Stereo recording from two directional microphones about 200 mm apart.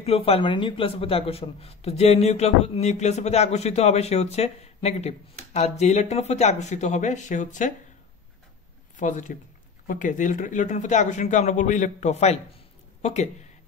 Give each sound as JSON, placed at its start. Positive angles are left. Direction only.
{"t": 0.0, "sound": "speech", "side_deg": 30}
{"t": 8.9, "sound": "speech", "side_deg": 40}